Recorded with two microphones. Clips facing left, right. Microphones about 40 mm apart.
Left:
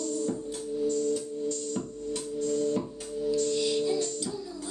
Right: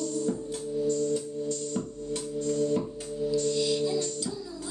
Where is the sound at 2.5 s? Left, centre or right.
Centre.